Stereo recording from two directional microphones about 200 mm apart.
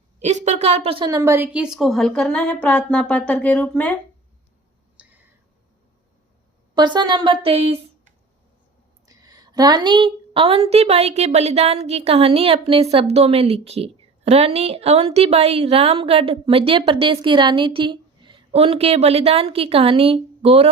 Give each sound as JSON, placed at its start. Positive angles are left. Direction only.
{"t": 0.2, "sound": "a woman's voice", "side_deg": -35}
{"t": 6.7, "sound": "speech", "side_deg": -20}
{"t": 9.0, "sound": "a woman's voice", "side_deg": -20}